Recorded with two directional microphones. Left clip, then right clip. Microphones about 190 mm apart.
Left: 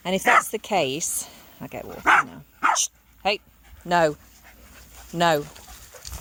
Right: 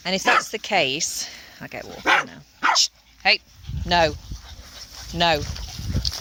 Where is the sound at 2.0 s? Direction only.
10° right (ahead or behind).